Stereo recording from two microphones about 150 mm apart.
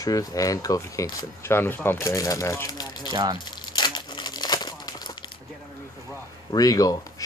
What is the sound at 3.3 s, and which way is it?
Crumpling, 30° left (ahead or behind).